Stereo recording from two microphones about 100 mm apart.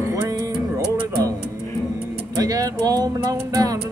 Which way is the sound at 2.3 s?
35° right (ahead or behind).